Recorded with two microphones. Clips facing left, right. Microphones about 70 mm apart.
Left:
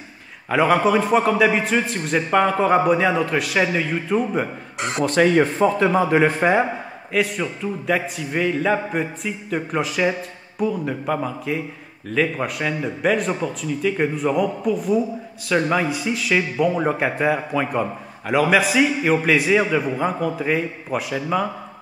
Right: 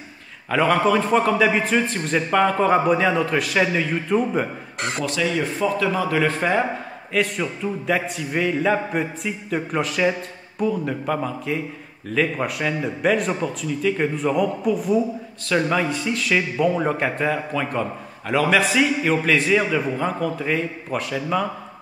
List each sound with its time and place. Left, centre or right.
0.5 s a man's voice: centre
5.0 s speech: left; by 6.7 s centre
7.1 s a man's voice: centre